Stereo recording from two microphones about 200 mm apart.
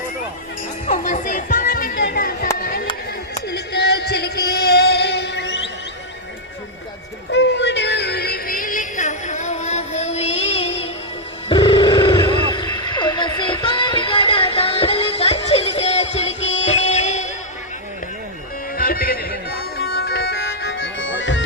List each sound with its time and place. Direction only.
0.9 s music: 40° left (ahead or behind); by 5.6 s 60° left (ahead or behind)
7.3 s music: 60° left (ahead or behind); by 10.8 s 30° left (ahead or behind)
11.4 s a sound: 25° left (ahead or behind)
16.6 s music: 35° left (ahead or behind)
18.8 s music: 45° left (ahead or behind); by 21.4 s 65° left (ahead or behind)